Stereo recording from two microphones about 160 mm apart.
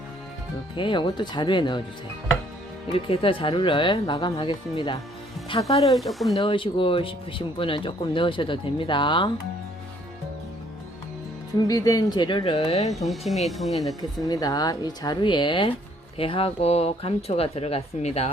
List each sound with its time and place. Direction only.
0.8 s speech: 30° left (ahead or behind)
2.9 s speech: 35° left (ahead or behind)
5.8 s speech: centre (ahead or behind)
6.3 s speech: 30° left (ahead or behind)
11.7 s speech: 20° left (ahead or behind); by 12.9 s 40° left (ahead or behind)
13.1 s speech: centre (ahead or behind)
14.3 s speech: 20° left (ahead or behind); by 18.3 s 40° left (ahead or behind)